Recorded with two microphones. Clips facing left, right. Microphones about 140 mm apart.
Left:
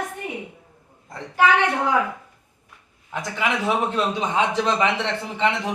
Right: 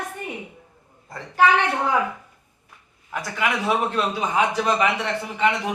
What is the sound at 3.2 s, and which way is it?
A man's voice, 20° left (ahead or behind).